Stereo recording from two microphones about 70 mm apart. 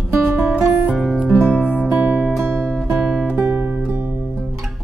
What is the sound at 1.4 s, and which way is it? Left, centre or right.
Music, centre.